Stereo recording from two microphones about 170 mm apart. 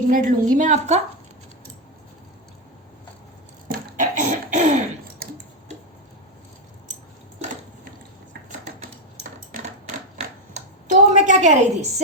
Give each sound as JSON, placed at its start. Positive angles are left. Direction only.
{"t": 0.1, "sound": "a woman's voice", "side_deg": -50}
{"t": 3.7, "sound": "cough", "side_deg": -50}
{"t": 5.2, "sound": "tick", "side_deg": -60}
{"t": 10.2, "sound": "a sound", "side_deg": -45}